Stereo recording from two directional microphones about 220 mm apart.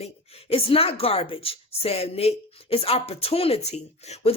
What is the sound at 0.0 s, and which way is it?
Speech, 25° left (ahead or behind).